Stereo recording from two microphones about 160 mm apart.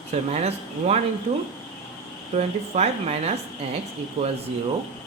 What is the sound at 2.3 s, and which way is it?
A woman's voice, 40° right (ahead or behind).